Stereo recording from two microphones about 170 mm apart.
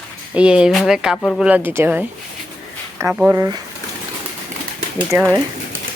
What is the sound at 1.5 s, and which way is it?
Speech, 10° right (ahead or behind).